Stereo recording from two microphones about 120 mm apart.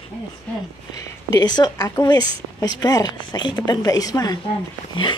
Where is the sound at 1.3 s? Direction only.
35° left (ahead or behind).